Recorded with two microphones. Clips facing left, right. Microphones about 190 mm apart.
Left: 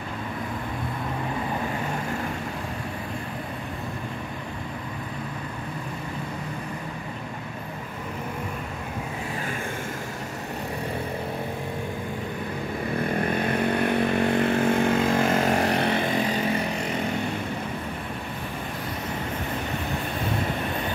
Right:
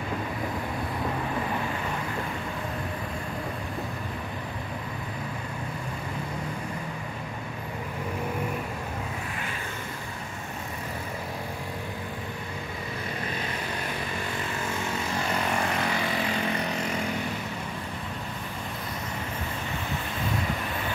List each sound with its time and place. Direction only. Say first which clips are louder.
13.1 s vehicle: left 9 dB; 55° left (ahead or behind); by 16.0 s 35° left (ahead or behind)